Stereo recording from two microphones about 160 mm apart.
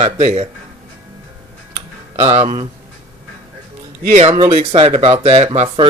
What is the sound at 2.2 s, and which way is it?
Speech, 45° right (ahead or behind).